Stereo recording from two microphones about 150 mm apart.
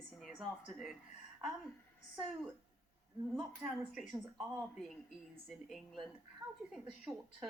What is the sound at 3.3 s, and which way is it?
A woman's voice, centre (ahead or behind).